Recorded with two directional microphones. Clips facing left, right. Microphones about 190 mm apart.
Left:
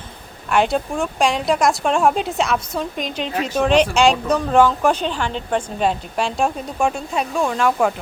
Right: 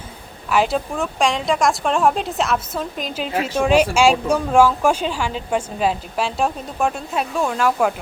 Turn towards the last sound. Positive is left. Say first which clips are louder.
# left 1 dB
turn(degrees=-5)  # may be behind; listen again after turning